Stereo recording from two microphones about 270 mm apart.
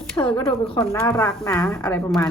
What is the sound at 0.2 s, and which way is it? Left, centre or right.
Speech, centre.